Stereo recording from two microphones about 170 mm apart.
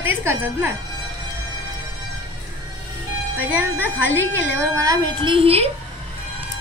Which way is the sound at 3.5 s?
10° right (ahead or behind).